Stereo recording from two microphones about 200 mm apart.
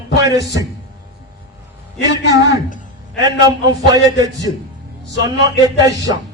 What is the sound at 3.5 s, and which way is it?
A man's voice, 20° right (ahead or behind).